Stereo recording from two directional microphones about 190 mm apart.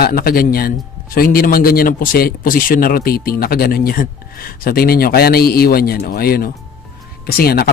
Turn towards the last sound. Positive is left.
turn(degrees=55)  # may be behind; listen again after turning